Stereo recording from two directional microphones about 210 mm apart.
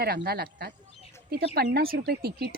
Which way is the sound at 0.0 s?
50° right (ahead or behind).